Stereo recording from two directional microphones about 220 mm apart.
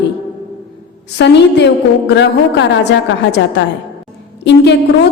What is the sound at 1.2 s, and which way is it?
A woman's voice, 50° left (ahead or behind).